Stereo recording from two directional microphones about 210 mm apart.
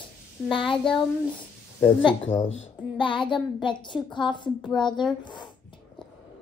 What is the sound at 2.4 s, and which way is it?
Speech, 70° left (ahead or behind).